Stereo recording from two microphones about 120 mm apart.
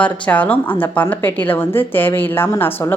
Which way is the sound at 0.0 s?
10° left (ahead or behind).